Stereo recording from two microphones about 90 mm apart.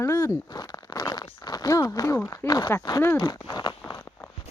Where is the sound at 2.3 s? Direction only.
45° left (ahead or behind).